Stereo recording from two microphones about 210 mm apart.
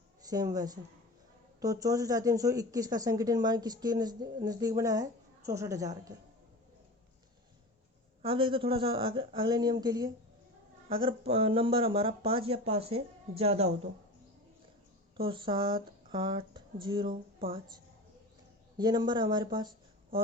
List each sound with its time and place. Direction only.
0.2 s a woman's voice: 15° right (ahead or behind)
8.2 s speech: 25° right (ahead or behind)
15.1 s speech: 25° right (ahead or behind)
18.8 s speech: 20° right (ahead or behind)